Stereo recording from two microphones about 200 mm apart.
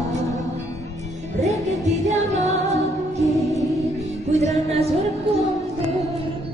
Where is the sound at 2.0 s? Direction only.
35° right (ahead or behind).